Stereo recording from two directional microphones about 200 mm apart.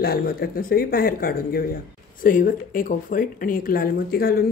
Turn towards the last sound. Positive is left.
turn(degrees=50)  # may be behind; listen again after turning